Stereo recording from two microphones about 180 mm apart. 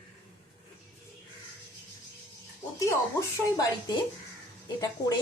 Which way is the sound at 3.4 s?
20° left (ahead or behind).